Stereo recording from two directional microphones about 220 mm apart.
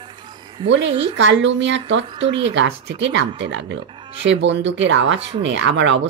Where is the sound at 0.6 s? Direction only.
55° right (ahead or behind).